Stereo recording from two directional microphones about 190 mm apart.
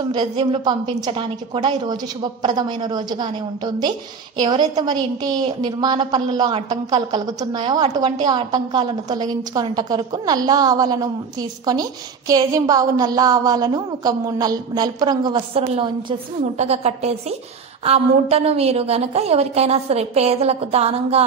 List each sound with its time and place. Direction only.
0.1 s a woman's voice: 25° right (ahead or behind)